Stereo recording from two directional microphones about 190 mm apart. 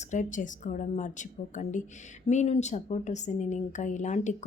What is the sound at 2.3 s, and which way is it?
Speech, 35° left (ahead or behind).